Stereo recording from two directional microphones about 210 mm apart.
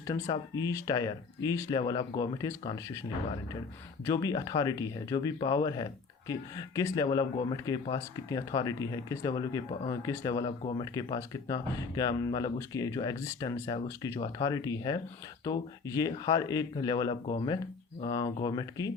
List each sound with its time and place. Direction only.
0.1 s speech: 20° left (ahead or behind)
4.0 s speech: 15° left (ahead or behind)